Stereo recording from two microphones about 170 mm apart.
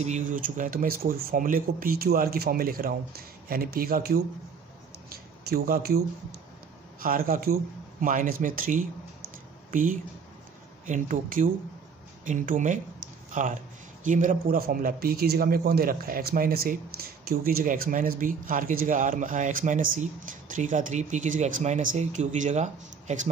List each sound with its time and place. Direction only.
0.0 s speech: 45° right (ahead or behind); by 4.2 s 60° right (ahead or behind)
5.5 s speech: 65° right (ahead or behind)
7.0 s a man's voice: 55° right (ahead or behind)